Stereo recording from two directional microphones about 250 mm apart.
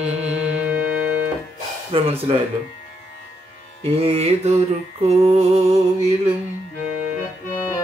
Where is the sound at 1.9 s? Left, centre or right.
Right.